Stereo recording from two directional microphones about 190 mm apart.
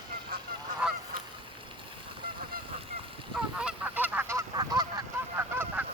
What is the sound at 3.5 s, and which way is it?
Honk, 5° right (ahead or behind).